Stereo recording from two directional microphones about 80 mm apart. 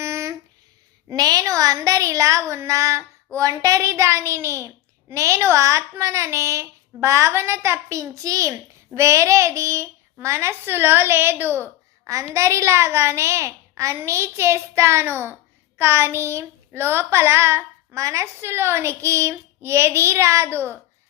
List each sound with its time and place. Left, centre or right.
0.0 s a sound: right
1.0 s speech: right
3.3 s child singing: right
12.0 s child singing: right